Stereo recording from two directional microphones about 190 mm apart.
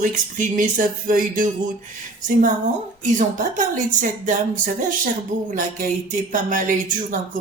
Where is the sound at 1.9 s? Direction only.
45° right (ahead or behind).